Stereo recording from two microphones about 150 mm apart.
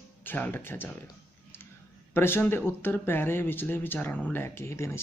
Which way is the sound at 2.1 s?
15° left (ahead or behind).